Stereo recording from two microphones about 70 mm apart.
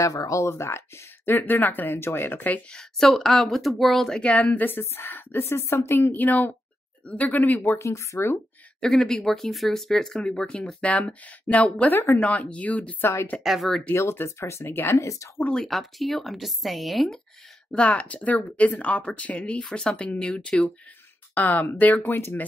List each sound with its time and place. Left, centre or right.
0.0 s speech: left
2.7 s speech: centre; by 8.4 s left
8.8 s speech: centre
11.9 s speech: left
12.2 s speech: centre
13.0 s speech: left
13.4 s speech: centre
13.9 s speech: left
15.5 s speech: centre
17.6 s speech: centre